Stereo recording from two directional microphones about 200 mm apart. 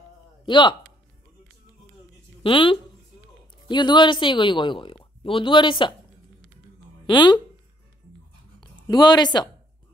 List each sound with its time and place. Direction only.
0.5 s speech: 25° left (ahead or behind)
2.4 s speech: 25° left (ahead or behind)
7.1 s speech: 20° left (ahead or behind)
8.5 s a woman's voice: 20° left (ahead or behind)